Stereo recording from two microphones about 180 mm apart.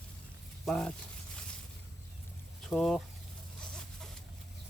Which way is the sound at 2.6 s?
Centre (ahead or behind).